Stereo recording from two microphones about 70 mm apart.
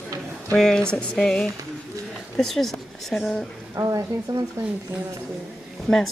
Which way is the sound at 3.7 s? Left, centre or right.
Right.